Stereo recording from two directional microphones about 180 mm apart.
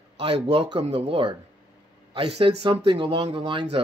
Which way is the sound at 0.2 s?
30° right (ahead or behind).